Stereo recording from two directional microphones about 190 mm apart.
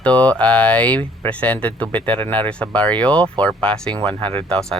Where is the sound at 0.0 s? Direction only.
5° left (ahead or behind).